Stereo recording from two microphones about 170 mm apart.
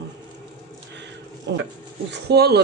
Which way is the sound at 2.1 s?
70° right (ahead or behind).